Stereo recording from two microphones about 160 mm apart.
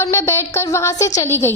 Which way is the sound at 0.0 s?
15° left (ahead or behind).